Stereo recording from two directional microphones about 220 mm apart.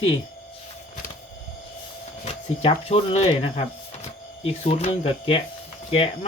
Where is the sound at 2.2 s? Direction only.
30° left (ahead or behind).